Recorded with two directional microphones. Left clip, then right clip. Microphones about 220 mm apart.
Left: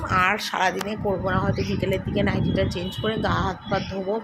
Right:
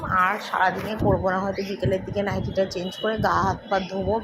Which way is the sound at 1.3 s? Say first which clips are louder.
Even; 5° left (ahead or behind).